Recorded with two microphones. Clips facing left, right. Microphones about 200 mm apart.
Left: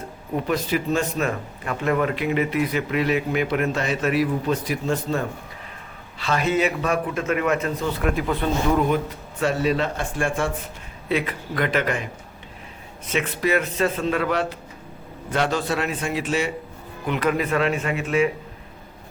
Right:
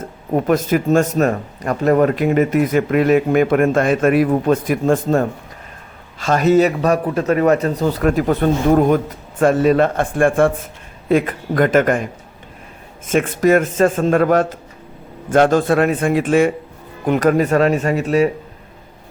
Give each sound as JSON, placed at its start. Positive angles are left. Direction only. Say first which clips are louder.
{"t": 0.0, "sound": "speech", "louder": "right 8 dB", "side_deg": -45}
{"t": 13.1, "sound": "speech", "louder": "right 9 dB", "side_deg": -50}